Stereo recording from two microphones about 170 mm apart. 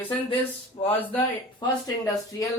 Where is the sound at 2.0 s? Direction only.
20° left (ahead or behind).